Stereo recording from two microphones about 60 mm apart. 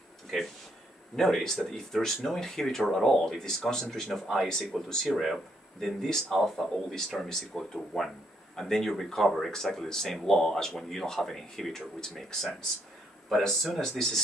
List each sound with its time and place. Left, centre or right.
1.1 s speech: centre